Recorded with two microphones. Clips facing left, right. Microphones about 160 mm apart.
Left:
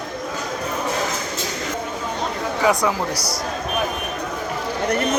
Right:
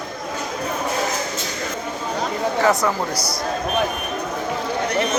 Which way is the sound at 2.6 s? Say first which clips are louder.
Even; 15° left (ahead or behind).